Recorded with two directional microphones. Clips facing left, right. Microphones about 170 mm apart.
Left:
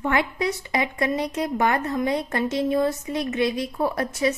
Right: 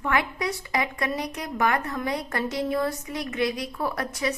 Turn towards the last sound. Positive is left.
turn(degrees=25)  # may be behind; listen again after turning